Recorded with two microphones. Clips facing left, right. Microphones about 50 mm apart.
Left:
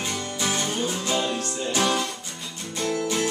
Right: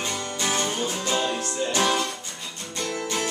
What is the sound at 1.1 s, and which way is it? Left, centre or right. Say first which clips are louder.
Music: even; centre.